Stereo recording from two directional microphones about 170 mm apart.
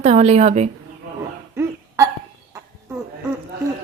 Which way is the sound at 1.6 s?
15° right (ahead or behind).